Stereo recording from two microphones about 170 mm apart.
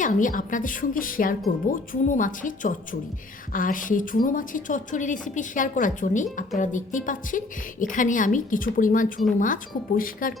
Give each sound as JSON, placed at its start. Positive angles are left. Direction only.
{"t": 0.0, "sound": "speech", "side_deg": 50}